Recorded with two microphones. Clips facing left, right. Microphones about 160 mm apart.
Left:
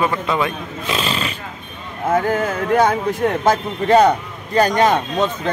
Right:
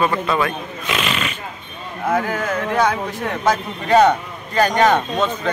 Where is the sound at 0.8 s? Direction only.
30° left (ahead or behind).